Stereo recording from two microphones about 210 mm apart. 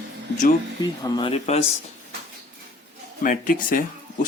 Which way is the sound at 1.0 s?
20° left (ahead or behind).